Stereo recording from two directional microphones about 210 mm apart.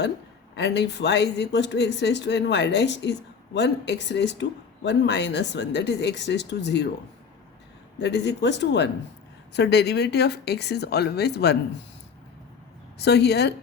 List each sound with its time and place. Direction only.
0.5 s speech: 55° left (ahead or behind)
7.9 s speech: 55° left (ahead or behind)
13.0 s speech: 50° left (ahead or behind)